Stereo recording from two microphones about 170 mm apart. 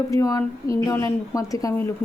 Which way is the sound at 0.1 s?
20° left (ahead or behind).